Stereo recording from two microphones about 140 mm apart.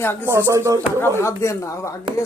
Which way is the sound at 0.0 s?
15° left (ahead or behind).